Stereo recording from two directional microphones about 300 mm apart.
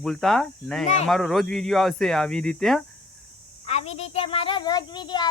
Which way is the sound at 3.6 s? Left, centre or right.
Centre.